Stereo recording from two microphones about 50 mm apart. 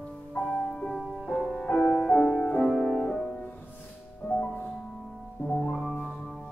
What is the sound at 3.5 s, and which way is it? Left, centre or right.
Music, left.